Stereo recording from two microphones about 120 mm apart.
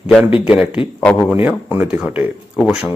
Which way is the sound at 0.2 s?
50° left (ahead or behind).